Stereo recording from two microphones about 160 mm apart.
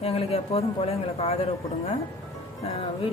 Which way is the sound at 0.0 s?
40° left (ahead or behind).